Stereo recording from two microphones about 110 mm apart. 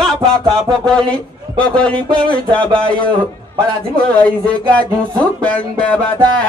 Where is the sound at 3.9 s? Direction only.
10° left (ahead or behind).